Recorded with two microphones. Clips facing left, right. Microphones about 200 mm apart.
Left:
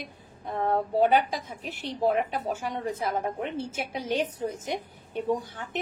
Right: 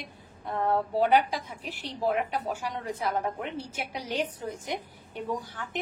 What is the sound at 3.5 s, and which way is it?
A woman's voice, 25° left (ahead or behind).